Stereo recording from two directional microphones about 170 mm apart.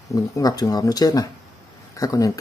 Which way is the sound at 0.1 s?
20° left (ahead or behind).